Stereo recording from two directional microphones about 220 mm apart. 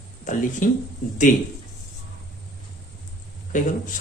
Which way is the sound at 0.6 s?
35° left (ahead or behind).